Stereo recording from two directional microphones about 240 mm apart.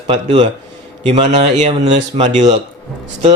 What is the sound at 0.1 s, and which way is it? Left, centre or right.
A man's voice, right.